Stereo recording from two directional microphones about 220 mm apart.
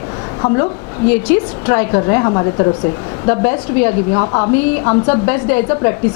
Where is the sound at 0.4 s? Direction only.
20° left (ahead or behind).